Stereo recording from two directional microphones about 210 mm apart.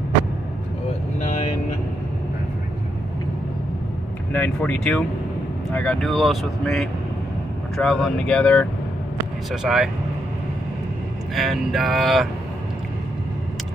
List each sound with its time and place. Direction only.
1.2 s vehicle: 35° left (ahead or behind)
4.3 s speech: 5° left (ahead or behind)
11.3 s speech: centre (ahead or behind)